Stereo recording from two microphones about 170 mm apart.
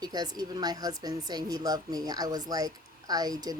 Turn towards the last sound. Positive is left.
turn(degrees=-25)  # may be behind; listen again after turning